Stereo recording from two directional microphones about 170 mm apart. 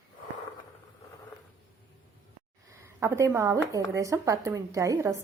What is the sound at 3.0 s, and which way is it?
Speech, 15° right (ahead or behind).